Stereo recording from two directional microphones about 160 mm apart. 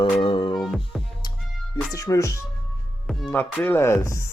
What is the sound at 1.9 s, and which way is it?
Speech, 20° left (ahead or behind).